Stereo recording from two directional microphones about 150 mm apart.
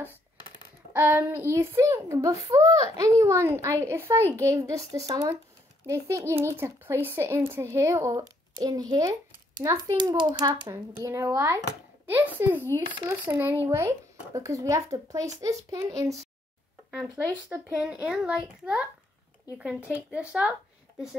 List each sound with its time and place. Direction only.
0.9 s a child's voice: 15° right (ahead or behind); by 10.7 s 30° right (ahead or behind)
10.7 s a child's voice: 20° right (ahead or behind)
17.5 s speech: 10° right (ahead or behind)